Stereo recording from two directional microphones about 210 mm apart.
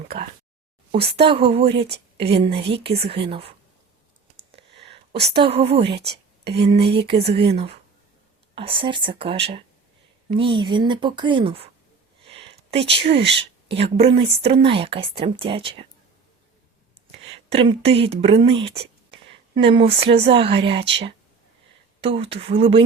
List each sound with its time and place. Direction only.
1.1 s a woman's voice: 25° right (ahead or behind)
4.4 s clicking: 30° right (ahead or behind)
5.3 s speech: 25° right (ahead or behind)
6.1 s whispering: 50° right (ahead or behind)
6.7 s speech: 50° right (ahead or behind)
7.1 s speech: 30° right (ahead or behind)
12.3 s a sound: 25° right (ahead or behind)
13.1 s speech: 55° right (ahead or behind)
13.7 s speech: 30° right (ahead or behind)
17.5 s speech: 25° right (ahead or behind)
19.1 s a sound: 25° right (ahead or behind)
20.1 s speech: 30° right (ahead or behind)